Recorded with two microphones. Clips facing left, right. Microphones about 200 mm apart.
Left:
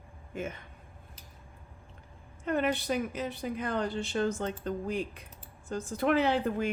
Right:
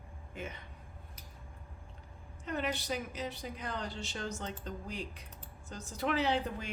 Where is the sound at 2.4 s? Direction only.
55° left (ahead or behind).